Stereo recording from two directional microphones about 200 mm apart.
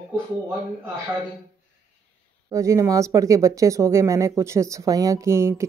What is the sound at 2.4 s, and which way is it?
Speech, 15° right (ahead or behind).